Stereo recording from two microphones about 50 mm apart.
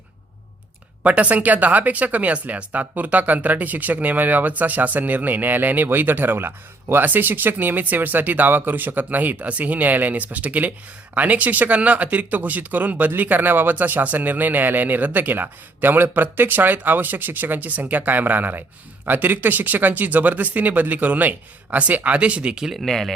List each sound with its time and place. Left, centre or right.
1.0 s speech: right
22.7 s speech: centre